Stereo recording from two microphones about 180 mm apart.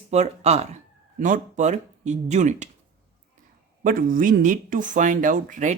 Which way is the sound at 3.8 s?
50° right (ahead or behind).